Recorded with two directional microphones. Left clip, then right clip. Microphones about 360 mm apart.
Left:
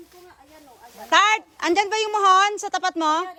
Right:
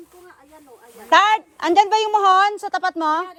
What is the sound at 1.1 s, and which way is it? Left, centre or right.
A woman's voice, centre.